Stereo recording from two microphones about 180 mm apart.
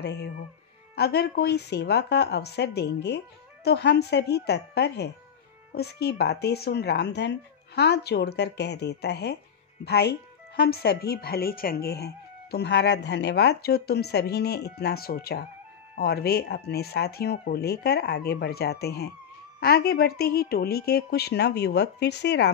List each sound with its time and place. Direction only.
0.0 s speech: 70° left (ahead or behind)